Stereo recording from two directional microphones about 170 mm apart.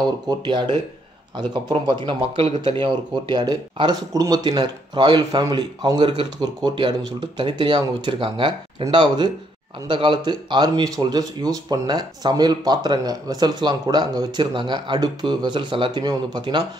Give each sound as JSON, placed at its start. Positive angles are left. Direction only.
{"t": 0.3, "sound": "speech", "side_deg": -25}